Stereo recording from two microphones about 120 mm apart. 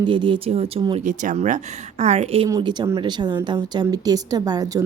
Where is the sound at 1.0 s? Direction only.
90° right; by 2.5 s 60° right (ahead or behind).